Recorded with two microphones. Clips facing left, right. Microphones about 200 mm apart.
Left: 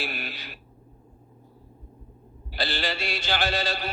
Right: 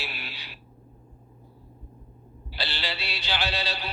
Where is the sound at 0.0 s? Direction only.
45° left (ahead or behind).